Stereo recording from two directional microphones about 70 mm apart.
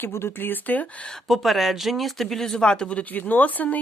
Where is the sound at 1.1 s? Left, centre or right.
Centre.